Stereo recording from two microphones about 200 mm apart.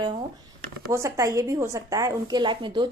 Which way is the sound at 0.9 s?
15° right (ahead or behind).